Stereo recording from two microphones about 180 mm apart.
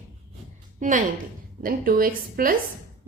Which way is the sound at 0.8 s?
45° right (ahead or behind).